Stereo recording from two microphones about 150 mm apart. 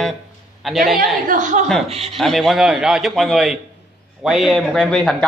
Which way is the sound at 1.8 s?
45° right (ahead or behind).